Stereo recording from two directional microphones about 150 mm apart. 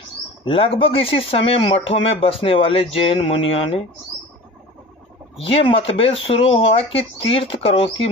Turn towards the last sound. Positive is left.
turn(degrees=40)  # may be behind; listen again after turning